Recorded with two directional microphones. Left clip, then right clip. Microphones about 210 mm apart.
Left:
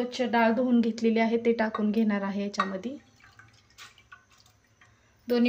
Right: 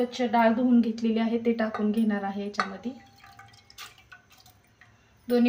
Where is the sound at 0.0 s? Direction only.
45° left (ahead or behind).